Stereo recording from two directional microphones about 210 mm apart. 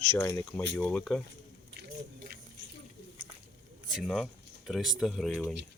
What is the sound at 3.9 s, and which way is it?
Speech, centre (ahead or behind).